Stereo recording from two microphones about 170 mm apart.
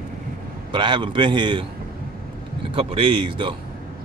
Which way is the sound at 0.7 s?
25° right (ahead or behind).